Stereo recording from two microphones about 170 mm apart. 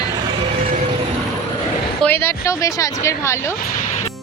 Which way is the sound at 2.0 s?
15° left (ahead or behind).